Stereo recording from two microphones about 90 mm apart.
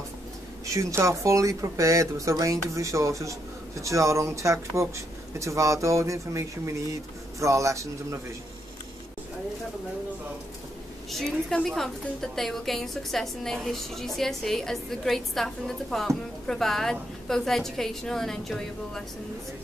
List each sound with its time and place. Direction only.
0.7 s speech: 35° right (ahead or behind)
11.1 s a woman's voice: 5° left (ahead or behind)